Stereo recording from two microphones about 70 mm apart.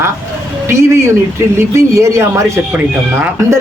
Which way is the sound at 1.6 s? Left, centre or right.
Right.